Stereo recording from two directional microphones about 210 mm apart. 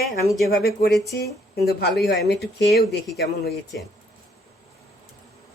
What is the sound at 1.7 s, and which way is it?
Speech, 50° left (ahead or behind).